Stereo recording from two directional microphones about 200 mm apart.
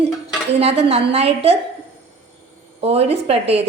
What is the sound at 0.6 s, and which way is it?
Speech, 30° right (ahead or behind).